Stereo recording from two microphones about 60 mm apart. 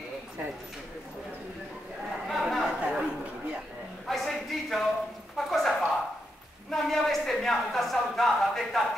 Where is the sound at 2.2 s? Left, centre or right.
Centre.